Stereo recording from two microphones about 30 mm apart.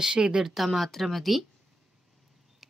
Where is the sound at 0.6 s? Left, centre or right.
Centre.